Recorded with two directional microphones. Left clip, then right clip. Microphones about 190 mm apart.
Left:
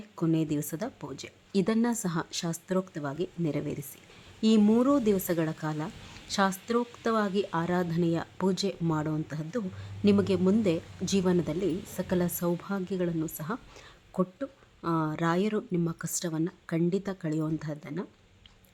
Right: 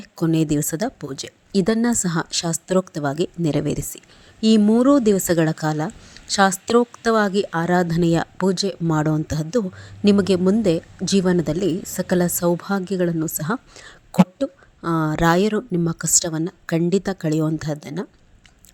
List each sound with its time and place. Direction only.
0.2 s a woman's voice: 35° right (ahead or behind)